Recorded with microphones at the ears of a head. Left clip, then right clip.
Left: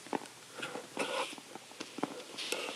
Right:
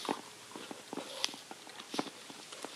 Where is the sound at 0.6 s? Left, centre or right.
Left.